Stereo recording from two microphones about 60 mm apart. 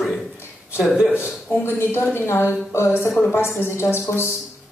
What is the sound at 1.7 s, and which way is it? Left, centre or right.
A woman's voice, left.